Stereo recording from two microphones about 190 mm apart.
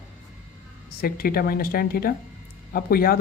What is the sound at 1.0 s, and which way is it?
Speech, 50° left (ahead or behind).